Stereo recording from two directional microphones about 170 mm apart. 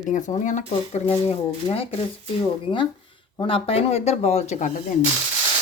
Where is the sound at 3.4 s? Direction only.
30° left (ahead or behind).